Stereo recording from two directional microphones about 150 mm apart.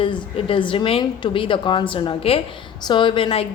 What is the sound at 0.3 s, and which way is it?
A woman's voice, 35° left (ahead or behind).